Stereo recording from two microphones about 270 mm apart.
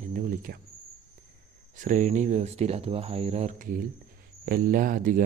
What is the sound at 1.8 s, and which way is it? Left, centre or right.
Speech, right.